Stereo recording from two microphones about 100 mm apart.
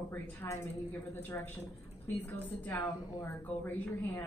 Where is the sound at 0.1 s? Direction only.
25° left (ahead or behind).